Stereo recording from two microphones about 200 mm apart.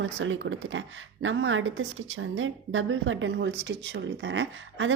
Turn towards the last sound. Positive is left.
turn(degrees=-70)  # may be behind; listen again after turning